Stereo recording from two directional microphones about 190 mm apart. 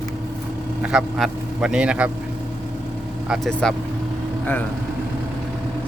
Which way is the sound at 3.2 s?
Centre (ahead or behind).